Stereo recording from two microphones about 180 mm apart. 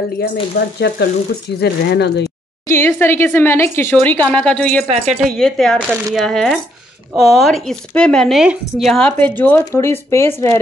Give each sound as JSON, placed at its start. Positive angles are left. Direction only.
{"t": 0.2, "sound": "sizzle", "side_deg": 70}
{"t": 2.7, "sound": "speech", "side_deg": 15}
{"t": 4.8, "sound": "speech", "side_deg": -40}
{"t": 5.4, "sound": "speech", "side_deg": 5}